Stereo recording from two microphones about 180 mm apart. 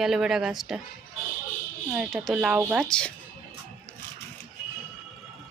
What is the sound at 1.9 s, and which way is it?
A woman's voice, 5° right (ahead or behind).